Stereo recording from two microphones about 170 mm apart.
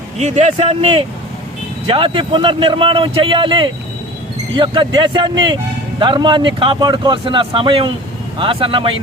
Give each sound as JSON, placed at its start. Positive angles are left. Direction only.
{"t": 0.2, "sound": "a man's voice", "side_deg": -45}